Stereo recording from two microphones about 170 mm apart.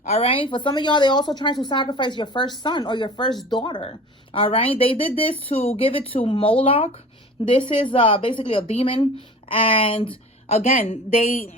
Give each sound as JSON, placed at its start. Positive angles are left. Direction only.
{"t": 0.0, "sound": "a woman's voice", "side_deg": 35}
{"t": 10.7, "sound": "speech", "side_deg": 55}